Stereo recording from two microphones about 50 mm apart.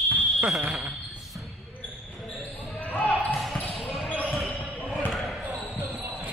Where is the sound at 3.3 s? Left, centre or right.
Centre.